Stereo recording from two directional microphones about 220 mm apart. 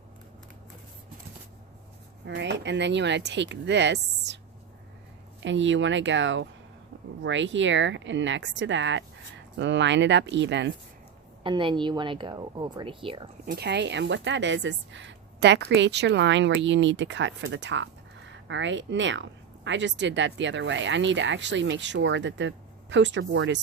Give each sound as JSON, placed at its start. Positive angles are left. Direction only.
{"t": 2.2, "sound": "speech", "side_deg": -55}
{"t": 5.4, "sound": "a woman's voice", "side_deg": -55}
{"t": 11.4, "sound": "speech", "side_deg": -20}
{"t": 13.4, "sound": "a woman's voice", "side_deg": -45}